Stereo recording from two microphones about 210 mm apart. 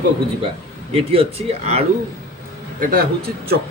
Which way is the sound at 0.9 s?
25° right (ahead or behind).